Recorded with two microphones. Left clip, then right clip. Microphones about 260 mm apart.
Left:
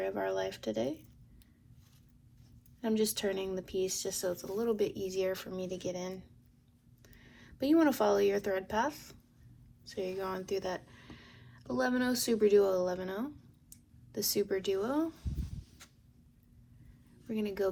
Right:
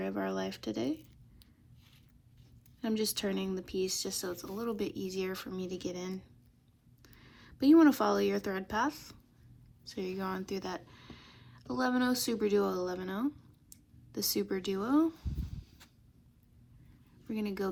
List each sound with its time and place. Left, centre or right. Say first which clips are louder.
0.1 s a sound: left 2 dB; right
2.8 s speech: left 2 dB; right
17.3 s speech: left 3 dB; right